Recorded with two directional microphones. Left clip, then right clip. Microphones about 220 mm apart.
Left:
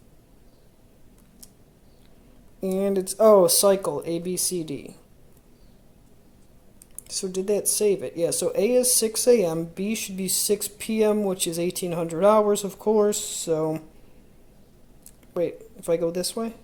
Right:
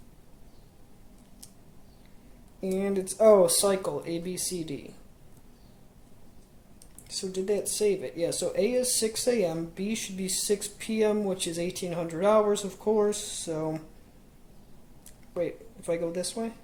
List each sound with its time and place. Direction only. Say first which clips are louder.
2.6 s speech: left 5 dB; 30° left (ahead or behind)
7.2 s speech: left 4 dB; 30° left (ahead or behind)
15.3 s speech: left 5 dB; 30° left (ahead or behind)